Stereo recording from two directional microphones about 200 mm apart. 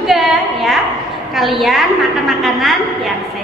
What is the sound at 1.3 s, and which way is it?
A woman's voice, centre (ahead or behind).